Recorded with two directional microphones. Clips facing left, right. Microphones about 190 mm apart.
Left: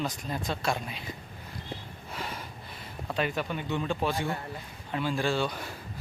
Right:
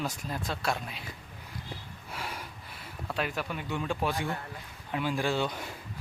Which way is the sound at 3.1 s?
5° right (ahead or behind).